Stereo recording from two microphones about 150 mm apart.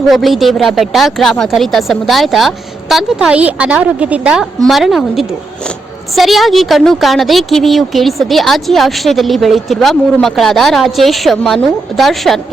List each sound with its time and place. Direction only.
0.1 s a woman's voice: centre (ahead or behind)